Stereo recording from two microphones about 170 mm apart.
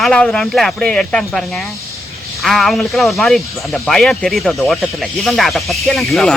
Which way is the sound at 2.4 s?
Centre (ahead or behind).